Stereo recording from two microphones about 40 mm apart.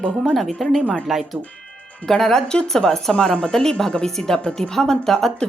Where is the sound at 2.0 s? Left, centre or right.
Centre.